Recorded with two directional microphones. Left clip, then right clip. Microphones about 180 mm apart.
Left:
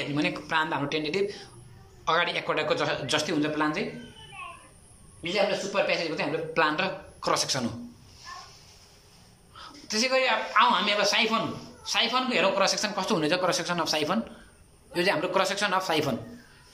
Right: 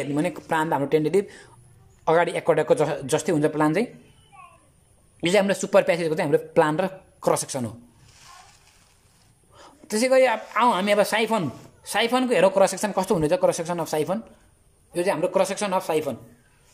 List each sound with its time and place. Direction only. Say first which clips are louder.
0.1 s a man's voice: right 3 dB; 35° right (ahead or behind)
5.2 s speech: right 5 dB; 55° right (ahead or behind); by 7.7 s 35° right (ahead or behind)
9.6 s a man's voice: right 3 dB; 40° right (ahead or behind)